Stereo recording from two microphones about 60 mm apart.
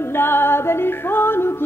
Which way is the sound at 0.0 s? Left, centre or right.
Left.